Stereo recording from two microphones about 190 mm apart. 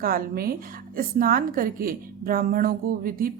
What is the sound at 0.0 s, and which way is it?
A woman's voice, 50° right (ahead or behind).